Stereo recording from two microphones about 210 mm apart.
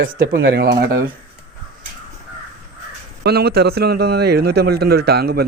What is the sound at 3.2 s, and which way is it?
A man's voice, 50° right (ahead or behind).